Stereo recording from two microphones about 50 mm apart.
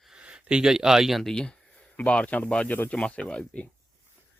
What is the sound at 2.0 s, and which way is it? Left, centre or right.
Speech, left.